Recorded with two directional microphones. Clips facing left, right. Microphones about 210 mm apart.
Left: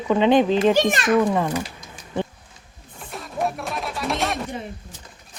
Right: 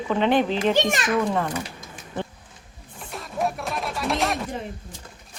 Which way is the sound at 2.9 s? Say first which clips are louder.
Left 1 dB; centre (ahead or behind).